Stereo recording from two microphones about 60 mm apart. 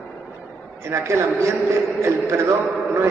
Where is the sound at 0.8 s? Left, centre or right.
Right.